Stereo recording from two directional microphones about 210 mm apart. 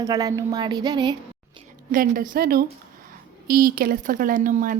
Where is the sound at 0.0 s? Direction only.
15° right (ahead or behind).